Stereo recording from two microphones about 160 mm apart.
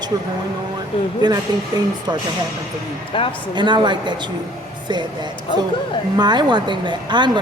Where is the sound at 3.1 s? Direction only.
30° left (ahead or behind).